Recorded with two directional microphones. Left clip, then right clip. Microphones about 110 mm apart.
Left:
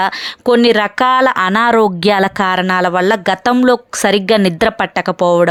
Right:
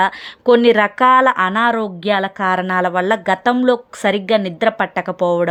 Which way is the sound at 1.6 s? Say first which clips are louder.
Left 6 dB; 75° left (ahead or behind).